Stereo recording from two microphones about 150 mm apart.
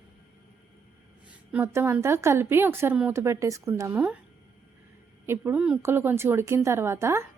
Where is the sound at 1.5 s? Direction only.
15° right (ahead or behind).